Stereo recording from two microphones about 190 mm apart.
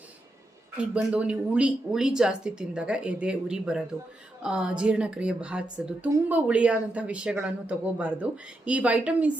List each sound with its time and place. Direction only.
0.8 s a woman's voice: 5° right (ahead or behind)